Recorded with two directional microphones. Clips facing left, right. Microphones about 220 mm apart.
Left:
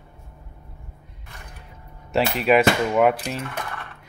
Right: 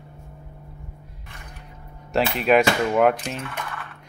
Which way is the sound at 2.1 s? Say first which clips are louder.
Even; centre (ahead or behind).